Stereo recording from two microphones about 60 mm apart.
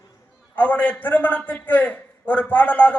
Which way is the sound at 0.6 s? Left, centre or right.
Left.